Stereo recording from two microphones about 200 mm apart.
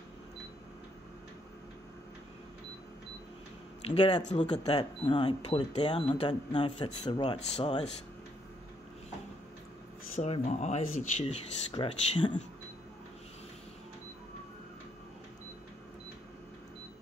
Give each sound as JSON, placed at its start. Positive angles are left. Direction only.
{"t": 3.9, "sound": "speech", "side_deg": 30}
{"t": 10.1, "sound": "speech", "side_deg": 30}